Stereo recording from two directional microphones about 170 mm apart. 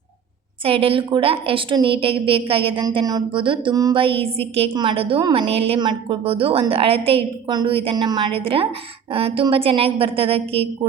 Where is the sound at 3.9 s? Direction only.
35° right (ahead or behind).